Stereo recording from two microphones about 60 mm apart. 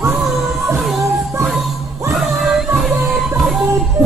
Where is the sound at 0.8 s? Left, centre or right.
Centre.